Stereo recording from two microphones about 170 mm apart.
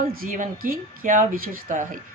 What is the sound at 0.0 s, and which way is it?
A woman's voice, 50° right (ahead or behind).